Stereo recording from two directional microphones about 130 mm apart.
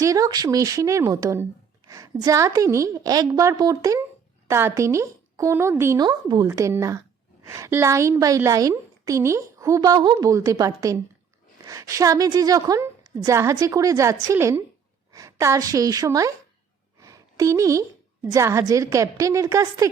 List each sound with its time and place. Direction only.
0.0 s a woman's voice: 25° right (ahead or behind)
17.0 s a sound: 25° right (ahead or behind)
18.7 s a woman's voice: 25° right (ahead or behind)